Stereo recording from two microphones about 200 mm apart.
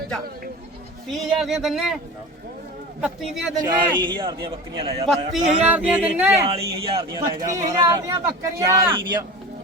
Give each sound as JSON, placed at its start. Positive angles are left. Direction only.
{"t": 1.1, "sound": "speech", "side_deg": 0}
{"t": 3.0, "sound": "speech", "side_deg": 0}
{"t": 3.6, "sound": "speech", "side_deg": -20}
{"t": 5.6, "sound": "speech", "side_deg": -5}
{"t": 6.4, "sound": "speech", "side_deg": -30}